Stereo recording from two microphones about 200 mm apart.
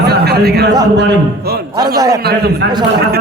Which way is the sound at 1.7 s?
20° right (ahead or behind).